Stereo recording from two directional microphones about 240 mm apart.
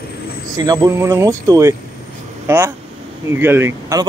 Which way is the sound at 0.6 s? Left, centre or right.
Centre.